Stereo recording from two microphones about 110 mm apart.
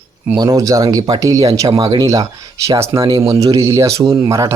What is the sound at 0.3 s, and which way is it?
Speech, 35° right (ahead or behind).